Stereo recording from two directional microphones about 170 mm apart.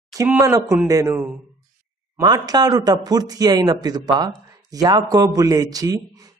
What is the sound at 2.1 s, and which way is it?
A man's voice, 20° right (ahead or behind).